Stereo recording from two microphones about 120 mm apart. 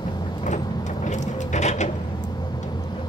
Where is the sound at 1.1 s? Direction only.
85° left.